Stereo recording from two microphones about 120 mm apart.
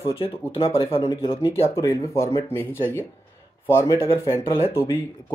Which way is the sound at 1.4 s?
25° left (ahead or behind).